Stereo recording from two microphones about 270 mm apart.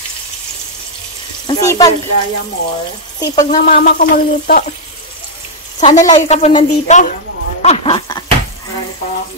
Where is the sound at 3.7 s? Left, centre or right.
Left.